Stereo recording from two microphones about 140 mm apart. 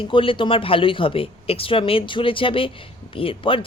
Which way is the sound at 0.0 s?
40° left (ahead or behind).